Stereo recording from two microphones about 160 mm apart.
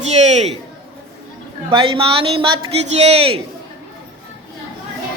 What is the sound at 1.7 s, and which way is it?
A woman's voice, 35° right (ahead or behind).